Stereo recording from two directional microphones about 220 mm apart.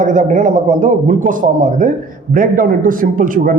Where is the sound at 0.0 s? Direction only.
35° right (ahead or behind).